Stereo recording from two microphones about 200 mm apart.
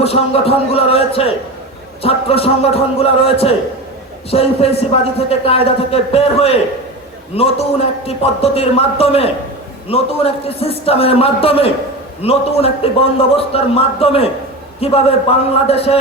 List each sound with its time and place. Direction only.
0.0 s a man's voice: 30° left (ahead or behind)
8.0 s a man's voice: 30° left (ahead or behind)